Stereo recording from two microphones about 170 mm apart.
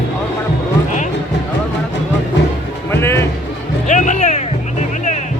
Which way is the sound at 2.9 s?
15° left (ahead or behind).